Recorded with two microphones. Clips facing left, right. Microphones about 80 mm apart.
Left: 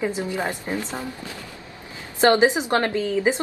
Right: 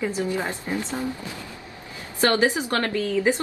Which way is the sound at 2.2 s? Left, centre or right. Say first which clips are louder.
Left 4 dB; left.